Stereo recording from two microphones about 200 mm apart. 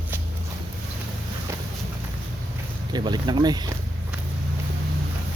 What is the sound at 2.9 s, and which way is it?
Speech, 20° right (ahead or behind).